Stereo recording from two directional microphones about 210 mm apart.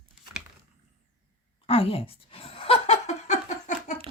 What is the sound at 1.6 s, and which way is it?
Laughter, 25° left (ahead or behind).